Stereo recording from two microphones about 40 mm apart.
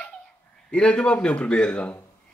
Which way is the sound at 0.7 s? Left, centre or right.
Left.